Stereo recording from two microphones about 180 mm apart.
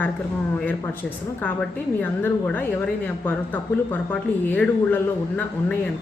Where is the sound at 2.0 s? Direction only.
10° left (ahead or behind).